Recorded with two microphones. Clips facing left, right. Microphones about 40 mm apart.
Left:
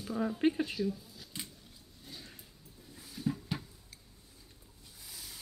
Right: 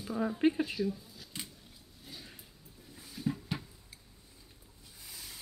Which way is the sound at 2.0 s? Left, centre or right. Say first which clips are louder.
Even; centre.